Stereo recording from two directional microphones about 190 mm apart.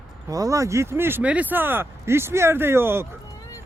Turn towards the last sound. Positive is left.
turn(degrees=-10)  # may be behind; listen again after turning